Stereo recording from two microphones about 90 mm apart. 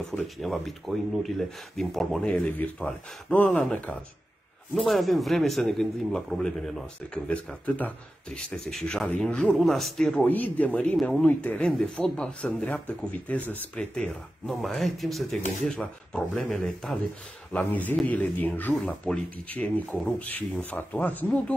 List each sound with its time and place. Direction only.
0.4 s speech: centre (ahead or behind)
4.8 s speech: centre (ahead or behind)
7.6 s speech: 15° left (ahead or behind)
10.2 s speech: 20° left (ahead or behind); by 17.0 s 5° left (ahead or behind)
17.5 s speech: 15° left (ahead or behind)